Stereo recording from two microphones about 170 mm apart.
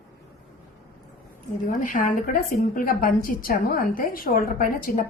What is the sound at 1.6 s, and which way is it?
A woman's voice, 50° left (ahead or behind).